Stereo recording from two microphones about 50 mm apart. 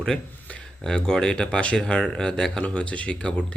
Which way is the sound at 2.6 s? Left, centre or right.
Left.